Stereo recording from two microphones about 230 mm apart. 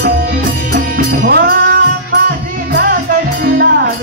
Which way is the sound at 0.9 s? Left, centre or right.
Right.